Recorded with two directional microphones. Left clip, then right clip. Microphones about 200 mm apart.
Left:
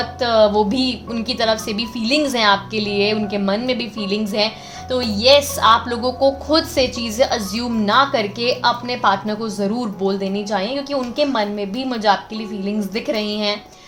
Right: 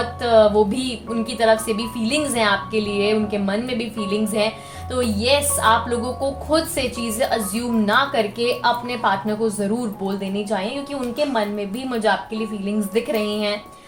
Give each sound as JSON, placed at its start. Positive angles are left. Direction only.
{"t": 0.2, "sound": "a woman's voice", "side_deg": 40}